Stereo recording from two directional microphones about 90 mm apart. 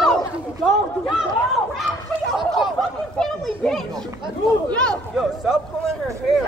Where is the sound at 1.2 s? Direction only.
Centre (ahead or behind).